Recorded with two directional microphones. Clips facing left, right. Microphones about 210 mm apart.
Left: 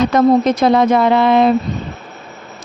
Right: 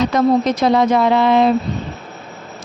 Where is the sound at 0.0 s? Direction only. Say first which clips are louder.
Left 3 dB; 55° left (ahead or behind).